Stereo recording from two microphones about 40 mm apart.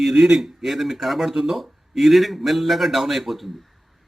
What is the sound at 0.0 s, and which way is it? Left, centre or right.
A man's voice, centre.